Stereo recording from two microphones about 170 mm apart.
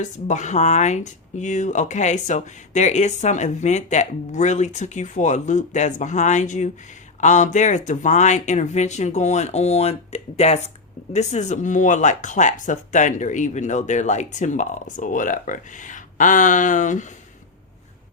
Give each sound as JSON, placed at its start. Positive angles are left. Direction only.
{"t": 0.0, "sound": "speech", "side_deg": 45}